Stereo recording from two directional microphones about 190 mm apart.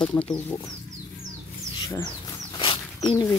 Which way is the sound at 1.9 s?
15° left (ahead or behind).